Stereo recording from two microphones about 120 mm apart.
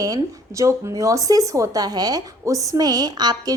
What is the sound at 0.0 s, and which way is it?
A woman's voice, 30° right (ahead or behind).